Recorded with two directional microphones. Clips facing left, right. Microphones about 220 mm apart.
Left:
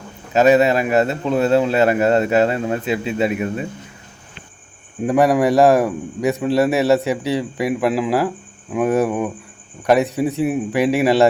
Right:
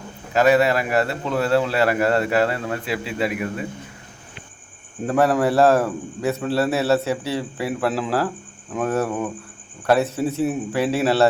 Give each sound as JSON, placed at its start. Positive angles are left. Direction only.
{"t": 0.3, "sound": "a man's voice", "side_deg": 20}
{"t": 5.0, "sound": "a man's voice", "side_deg": 15}